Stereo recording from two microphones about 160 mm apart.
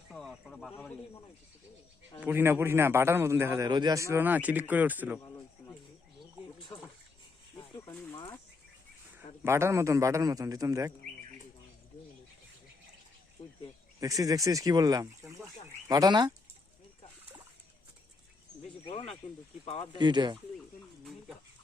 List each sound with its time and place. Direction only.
0.1 s speech: centre (ahead or behind)
2.2 s speech: 15° right (ahead or behind)
3.7 s speech: 25° right (ahead or behind); by 5.2 s 10° right (ahead or behind)
8.1 s speech: 25° left (ahead or behind)
9.4 s a man's voice: 15° right (ahead or behind)
14.0 s a man's voice: 20° right (ahead or behind)
18.9 s speech: 35° left (ahead or behind)
20.0 s a man's voice: 30° right (ahead or behind)